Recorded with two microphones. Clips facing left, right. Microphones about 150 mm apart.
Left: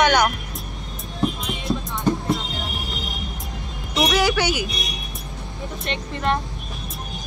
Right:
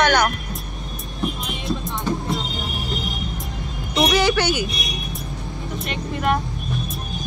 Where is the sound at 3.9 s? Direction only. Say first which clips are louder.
Right 2 dB; centre (ahead or behind).